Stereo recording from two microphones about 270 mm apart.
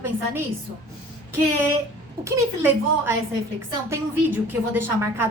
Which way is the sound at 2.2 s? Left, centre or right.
Centre.